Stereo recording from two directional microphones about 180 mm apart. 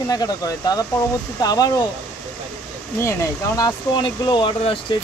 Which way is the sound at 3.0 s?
15° left (ahead or behind).